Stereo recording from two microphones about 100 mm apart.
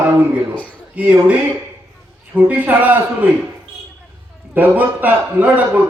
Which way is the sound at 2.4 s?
15° right (ahead or behind).